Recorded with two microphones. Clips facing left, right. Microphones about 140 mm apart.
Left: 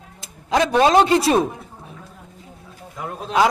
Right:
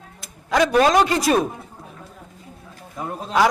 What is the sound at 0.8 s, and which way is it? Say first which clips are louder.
Speech: left 2 dB; 30° left (ahead or behind).